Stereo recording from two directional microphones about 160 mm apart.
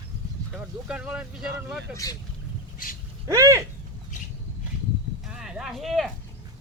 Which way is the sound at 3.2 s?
20° right (ahead or behind).